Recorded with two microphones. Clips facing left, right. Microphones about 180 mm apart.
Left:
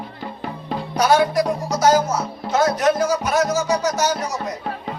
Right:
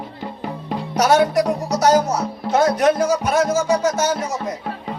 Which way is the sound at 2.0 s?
65° right (ahead or behind).